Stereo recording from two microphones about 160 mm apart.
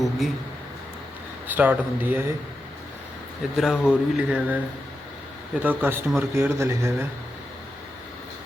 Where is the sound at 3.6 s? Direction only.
5° right (ahead or behind).